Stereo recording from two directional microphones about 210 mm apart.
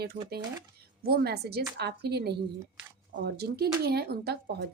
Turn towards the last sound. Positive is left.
turn(degrees=-50)  # may be behind; listen again after turning